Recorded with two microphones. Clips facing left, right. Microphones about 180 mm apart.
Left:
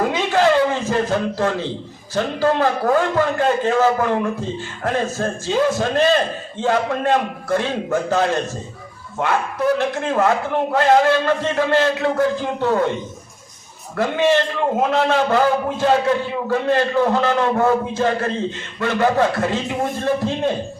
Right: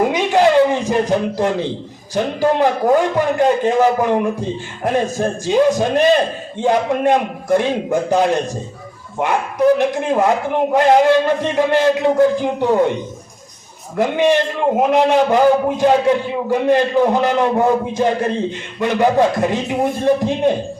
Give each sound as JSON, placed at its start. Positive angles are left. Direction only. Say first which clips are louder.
{"t": 0.0, "sound": "a man's voice", "louder": "right 3 dB", "side_deg": -15}
{"t": 13.9, "sound": "a man's voice", "louder": "right 2 dB", "side_deg": -15}